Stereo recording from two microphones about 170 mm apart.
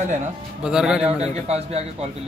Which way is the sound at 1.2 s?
40° right (ahead or behind).